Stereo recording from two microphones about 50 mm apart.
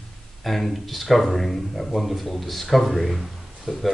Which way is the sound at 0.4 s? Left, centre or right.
Centre.